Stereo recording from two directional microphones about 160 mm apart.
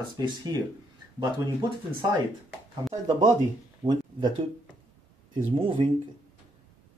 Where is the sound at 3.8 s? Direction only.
15° right (ahead or behind).